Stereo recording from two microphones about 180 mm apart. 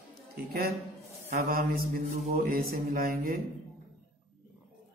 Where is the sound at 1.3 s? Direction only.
55° right (ahead or behind).